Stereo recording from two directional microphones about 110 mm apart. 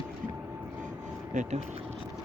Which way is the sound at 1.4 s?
90° right.